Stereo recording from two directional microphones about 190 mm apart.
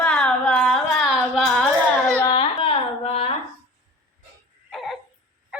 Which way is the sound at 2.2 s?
20° left (ahead or behind).